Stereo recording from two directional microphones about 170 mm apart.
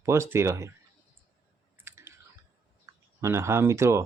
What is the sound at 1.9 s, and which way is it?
Clicking, 15° right (ahead or behind).